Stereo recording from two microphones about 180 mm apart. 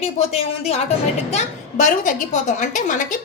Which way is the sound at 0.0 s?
35° left (ahead or behind).